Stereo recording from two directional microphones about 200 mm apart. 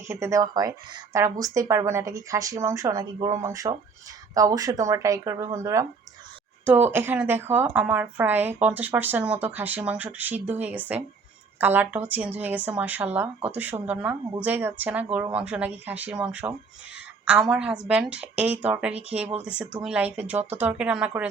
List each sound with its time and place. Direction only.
0.1 s a woman's voice: 15° right (ahead or behind)